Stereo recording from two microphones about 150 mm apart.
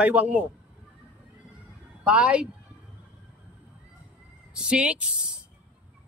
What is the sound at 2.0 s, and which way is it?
Speech, 5° right (ahead or behind).